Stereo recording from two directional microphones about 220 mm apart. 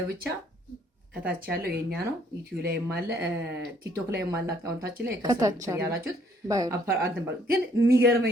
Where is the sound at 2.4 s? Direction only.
45° right (ahead or behind).